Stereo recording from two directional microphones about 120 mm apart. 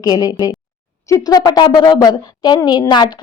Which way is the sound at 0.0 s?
35° left (ahead or behind).